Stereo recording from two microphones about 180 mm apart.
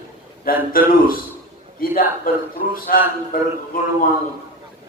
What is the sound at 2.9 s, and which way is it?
A man's voice, 55° left (ahead or behind).